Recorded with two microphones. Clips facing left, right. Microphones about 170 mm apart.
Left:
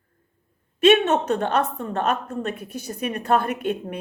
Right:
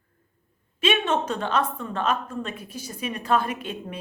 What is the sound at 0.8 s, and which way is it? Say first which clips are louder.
A woman's voice: left 7 dB; 60° left (ahead or behind).